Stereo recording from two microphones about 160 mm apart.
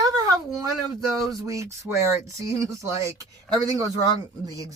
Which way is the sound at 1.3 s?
20° right (ahead or behind).